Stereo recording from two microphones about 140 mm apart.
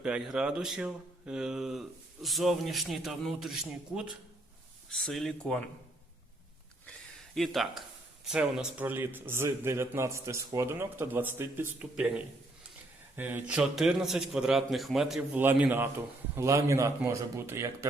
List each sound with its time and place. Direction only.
0.0 s speech: 5° right (ahead or behind)
7.3 s speech: centre (ahead or behind)
15.4 s a man's voice: 15° right (ahead or behind)